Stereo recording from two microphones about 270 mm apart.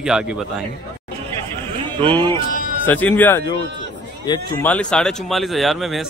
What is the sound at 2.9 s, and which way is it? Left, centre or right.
Speech, centre.